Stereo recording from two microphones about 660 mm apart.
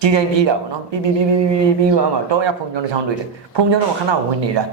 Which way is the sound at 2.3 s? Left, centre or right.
Right.